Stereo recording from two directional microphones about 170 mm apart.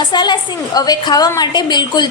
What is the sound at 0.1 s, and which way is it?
A woman's voice, 25° left (ahead or behind).